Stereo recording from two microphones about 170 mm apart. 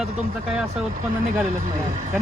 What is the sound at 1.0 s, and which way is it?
Speech, 50° right (ahead or behind).